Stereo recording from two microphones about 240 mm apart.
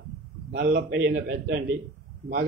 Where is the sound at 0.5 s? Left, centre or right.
Right.